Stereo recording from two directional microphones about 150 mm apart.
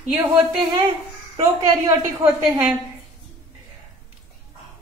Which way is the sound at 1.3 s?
25° right (ahead or behind).